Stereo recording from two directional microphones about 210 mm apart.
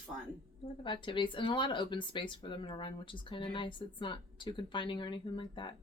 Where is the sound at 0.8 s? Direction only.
25° left (ahead or behind).